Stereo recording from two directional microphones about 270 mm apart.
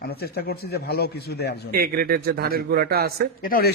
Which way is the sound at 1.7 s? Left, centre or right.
Right.